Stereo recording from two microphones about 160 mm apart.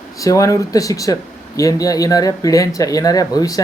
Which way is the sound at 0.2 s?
20° left (ahead or behind).